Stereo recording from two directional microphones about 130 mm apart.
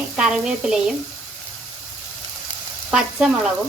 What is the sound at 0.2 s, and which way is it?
Speech, 5° right (ahead or behind).